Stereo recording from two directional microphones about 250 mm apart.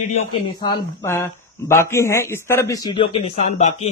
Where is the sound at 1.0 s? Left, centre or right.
Centre; by 3.9 s left.